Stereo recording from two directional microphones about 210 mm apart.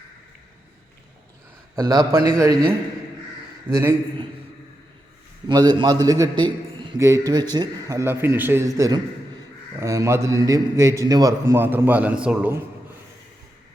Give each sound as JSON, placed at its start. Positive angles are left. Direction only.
{"t": 1.7, "sound": "a man's voice", "side_deg": -20}
{"t": 3.7, "sound": "a man's voice", "side_deg": -10}
{"t": 5.5, "sound": "a man's voice", "side_deg": -20}